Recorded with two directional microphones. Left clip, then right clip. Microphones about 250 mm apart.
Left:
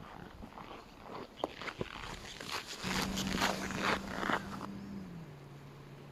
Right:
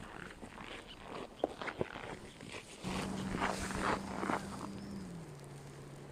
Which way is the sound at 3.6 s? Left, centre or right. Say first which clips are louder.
Left 2 dB; left.